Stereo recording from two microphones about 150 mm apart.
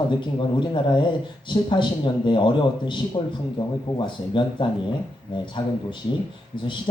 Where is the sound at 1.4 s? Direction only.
30° left (ahead or behind).